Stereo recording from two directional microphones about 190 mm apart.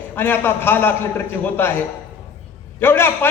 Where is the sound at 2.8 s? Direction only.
10° left (ahead or behind).